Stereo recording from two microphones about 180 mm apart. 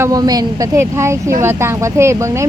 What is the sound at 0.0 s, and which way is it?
Speech, 20° right (ahead or behind).